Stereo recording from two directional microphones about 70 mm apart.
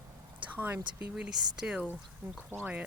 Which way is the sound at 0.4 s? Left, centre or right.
Right.